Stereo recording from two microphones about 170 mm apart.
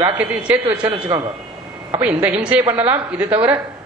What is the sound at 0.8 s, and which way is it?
Speech, 25° right (ahead or behind).